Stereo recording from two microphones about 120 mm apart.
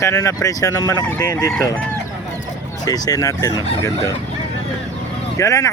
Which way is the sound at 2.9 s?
30° left (ahead or behind).